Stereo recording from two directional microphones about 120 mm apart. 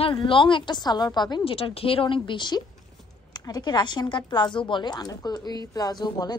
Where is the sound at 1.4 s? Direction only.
50° left (ahead or behind).